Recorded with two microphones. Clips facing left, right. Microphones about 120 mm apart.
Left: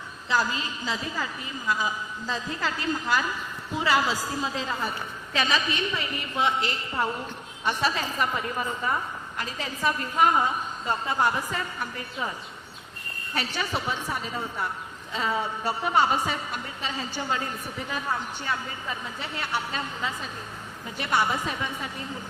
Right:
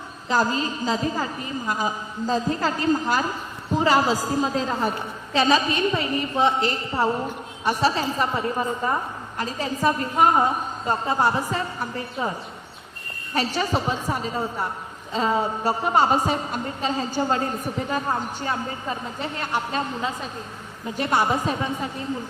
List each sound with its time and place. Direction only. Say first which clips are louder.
0.3 s a woman's voice: right 5 dB; 40° right (ahead or behind)